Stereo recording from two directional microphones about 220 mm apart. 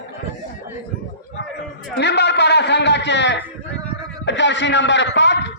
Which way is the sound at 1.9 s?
50° left (ahead or behind).